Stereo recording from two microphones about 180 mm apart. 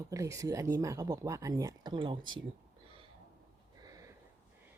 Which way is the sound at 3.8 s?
20° right (ahead or behind).